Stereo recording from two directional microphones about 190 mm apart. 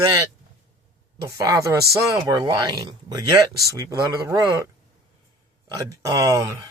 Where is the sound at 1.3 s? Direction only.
20° right (ahead or behind).